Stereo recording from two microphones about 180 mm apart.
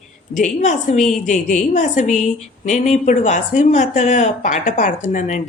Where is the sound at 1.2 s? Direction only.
45° left (ahead or behind).